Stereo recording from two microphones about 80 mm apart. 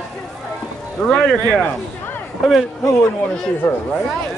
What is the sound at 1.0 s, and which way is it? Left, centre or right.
Speech, centre.